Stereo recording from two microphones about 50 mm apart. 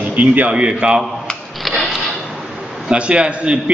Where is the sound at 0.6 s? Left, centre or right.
Right.